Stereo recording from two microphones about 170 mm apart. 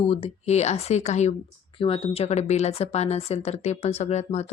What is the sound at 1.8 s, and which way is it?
A woman's voice, 30° left (ahead or behind).